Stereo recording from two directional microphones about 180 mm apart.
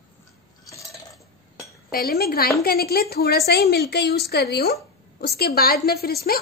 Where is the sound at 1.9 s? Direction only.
60° left (ahead or behind).